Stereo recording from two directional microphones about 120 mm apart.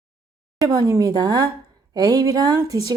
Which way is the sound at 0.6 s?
30° right (ahead or behind).